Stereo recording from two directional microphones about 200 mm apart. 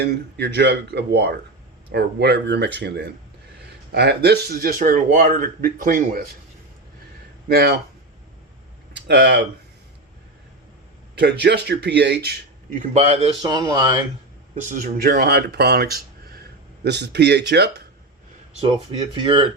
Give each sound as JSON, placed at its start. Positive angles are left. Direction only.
{"t": 0.0, "sound": "speech", "side_deg": -55}
{"t": 7.4, "sound": "speech", "side_deg": -55}
{"t": 8.9, "sound": "a sound", "side_deg": -60}
{"t": 11.1, "sound": "speech", "side_deg": -55}
{"t": 12.8, "sound": "a man's voice", "side_deg": -35}
{"t": 13.4, "sound": "speech", "side_deg": -20}
{"t": 14.5, "sound": "speech", "side_deg": -40}
{"t": 18.6, "sound": "speech", "side_deg": -25}